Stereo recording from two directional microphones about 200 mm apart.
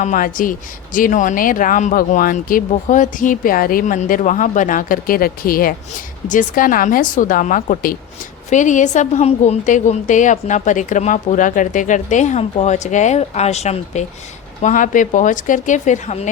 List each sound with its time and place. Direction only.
0.0 s a woman's voice: 40° left (ahead or behind)